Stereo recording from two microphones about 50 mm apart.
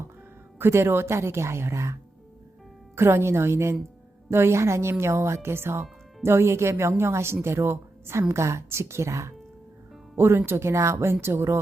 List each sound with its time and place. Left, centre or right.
0.6 s speech: right
2.9 s a woman's voice: right
8.3 s a woman's voice: right
10.2 s speech: right